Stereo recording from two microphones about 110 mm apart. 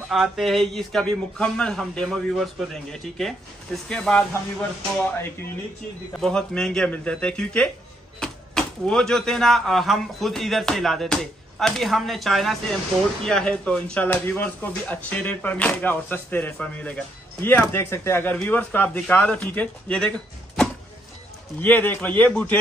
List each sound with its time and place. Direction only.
0.1 s speech: centre (ahead or behind)
6.1 s speech: 5° left (ahead or behind)
21.5 s speech: 15° left (ahead or behind)